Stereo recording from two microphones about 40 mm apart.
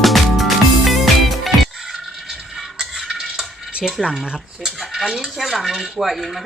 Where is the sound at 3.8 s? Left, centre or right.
Centre.